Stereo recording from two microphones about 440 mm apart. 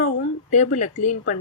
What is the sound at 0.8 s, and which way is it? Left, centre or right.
Speech, centre.